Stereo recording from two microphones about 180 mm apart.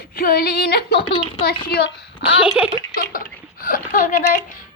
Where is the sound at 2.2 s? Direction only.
5° right (ahead or behind).